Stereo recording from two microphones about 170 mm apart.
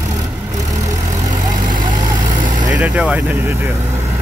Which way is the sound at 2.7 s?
10° right (ahead or behind).